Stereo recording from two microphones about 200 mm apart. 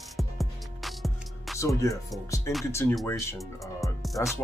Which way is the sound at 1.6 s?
15° left (ahead or behind).